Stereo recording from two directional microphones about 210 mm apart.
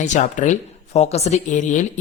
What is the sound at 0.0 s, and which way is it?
A man's voice, 35° left (ahead or behind).